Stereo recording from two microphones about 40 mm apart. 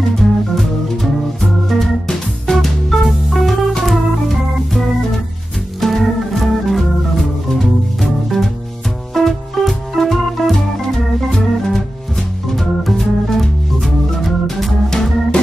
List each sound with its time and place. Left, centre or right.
0.6 s organ: centre
3.0 s music: centre
3.8 s organ: centre
9.1 s music: centre
11.1 s organ: centre
14.9 s organ: centre